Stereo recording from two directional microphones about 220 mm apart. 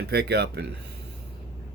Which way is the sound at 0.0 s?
50° right (ahead or behind).